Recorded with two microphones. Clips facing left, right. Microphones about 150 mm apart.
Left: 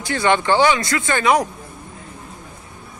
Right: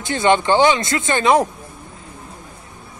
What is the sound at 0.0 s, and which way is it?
Speech, 20° right (ahead or behind).